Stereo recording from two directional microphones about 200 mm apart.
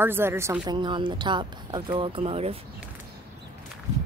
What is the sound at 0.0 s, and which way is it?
A woman's voice, 10° right (ahead or behind).